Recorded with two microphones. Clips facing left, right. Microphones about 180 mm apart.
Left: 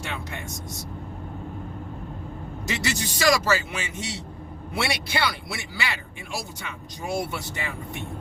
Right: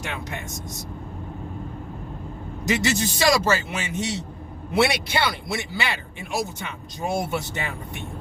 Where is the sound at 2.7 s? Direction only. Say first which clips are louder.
Right 6 dB; 25° right (ahead or behind).